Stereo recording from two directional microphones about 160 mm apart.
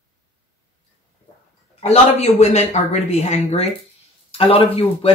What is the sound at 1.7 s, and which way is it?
Speech, 40° left (ahead or behind).